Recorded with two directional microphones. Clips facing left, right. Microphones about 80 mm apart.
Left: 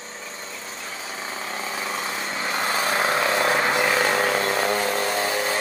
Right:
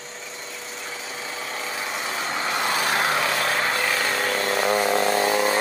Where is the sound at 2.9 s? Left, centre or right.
Left.